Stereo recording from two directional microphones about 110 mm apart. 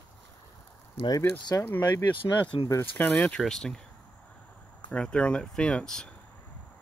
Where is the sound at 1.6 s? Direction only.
20° left (ahead or behind); by 3.8 s 5° left (ahead or behind).